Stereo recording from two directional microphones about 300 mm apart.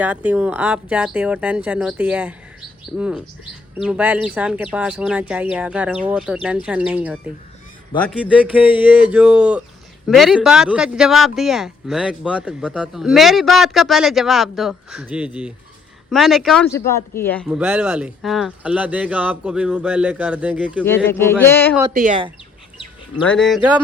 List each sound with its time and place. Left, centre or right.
0.0 s speech: centre
20.8 s speech: centre
21.9 s speech: right
23.2 s speech: centre